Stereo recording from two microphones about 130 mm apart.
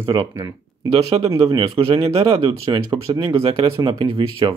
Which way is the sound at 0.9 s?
50° right (ahead or behind).